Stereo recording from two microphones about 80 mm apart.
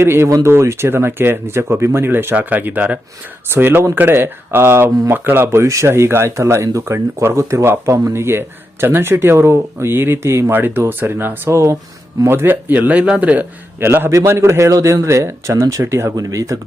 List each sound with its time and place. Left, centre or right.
0.0 s speech: right
13.7 s speech: right